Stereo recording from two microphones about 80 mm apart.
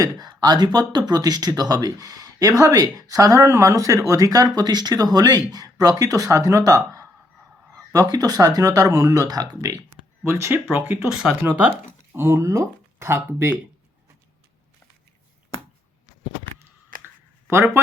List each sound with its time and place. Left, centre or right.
0.0 s speech: right
9.6 s speech: right
10.5 s speech: right
11.1 s speech: centre
12.1 s speech: right